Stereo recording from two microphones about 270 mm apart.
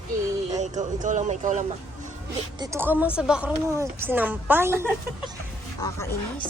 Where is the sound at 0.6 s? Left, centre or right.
Right.